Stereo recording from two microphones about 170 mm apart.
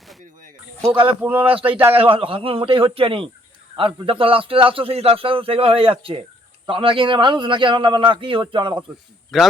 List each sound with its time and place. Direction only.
1.0 s speech: 10° right (ahead or behind)
2.0 s a man's voice: 35° right (ahead or behind)
9.3 s a man's voice: centre (ahead or behind)